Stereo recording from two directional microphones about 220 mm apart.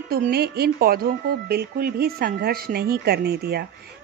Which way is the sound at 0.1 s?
45° right (ahead or behind).